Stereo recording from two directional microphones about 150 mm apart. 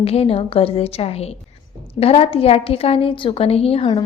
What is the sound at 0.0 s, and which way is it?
A woman's voice, 40° left (ahead or behind).